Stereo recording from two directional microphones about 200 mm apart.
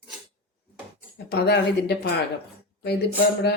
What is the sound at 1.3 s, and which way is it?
Speech, 55° left (ahead or behind).